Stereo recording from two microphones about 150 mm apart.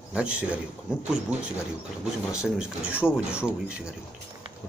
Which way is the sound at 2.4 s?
5° right (ahead or behind).